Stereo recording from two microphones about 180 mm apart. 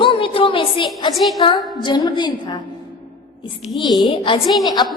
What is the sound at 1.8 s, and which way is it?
Speech, 25° left (ahead or behind).